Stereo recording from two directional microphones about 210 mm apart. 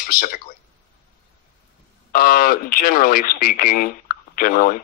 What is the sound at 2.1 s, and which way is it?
A man's voice, 40° left (ahead or behind).